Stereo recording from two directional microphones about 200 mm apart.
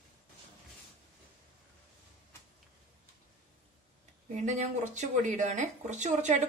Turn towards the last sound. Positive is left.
turn(degrees=-35)  # may be behind; listen again after turning